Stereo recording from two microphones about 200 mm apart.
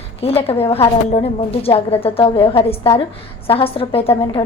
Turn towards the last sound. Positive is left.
turn(degrees=30)  # may be behind; listen again after turning